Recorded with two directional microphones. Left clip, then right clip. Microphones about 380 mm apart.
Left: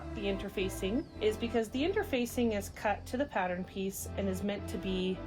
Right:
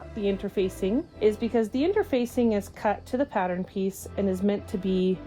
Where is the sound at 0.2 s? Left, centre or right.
Right.